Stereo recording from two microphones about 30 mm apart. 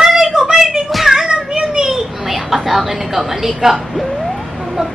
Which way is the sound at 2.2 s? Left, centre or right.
Centre.